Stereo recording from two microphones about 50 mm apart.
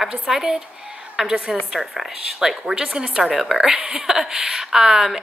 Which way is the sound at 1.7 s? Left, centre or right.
Centre.